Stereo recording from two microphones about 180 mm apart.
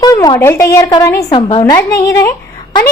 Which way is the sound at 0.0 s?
20° left (ahead or behind).